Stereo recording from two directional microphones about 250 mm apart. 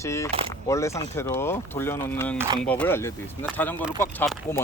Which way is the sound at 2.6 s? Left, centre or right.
Centre.